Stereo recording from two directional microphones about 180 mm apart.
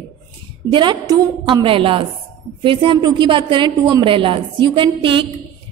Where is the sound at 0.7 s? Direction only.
25° right (ahead or behind).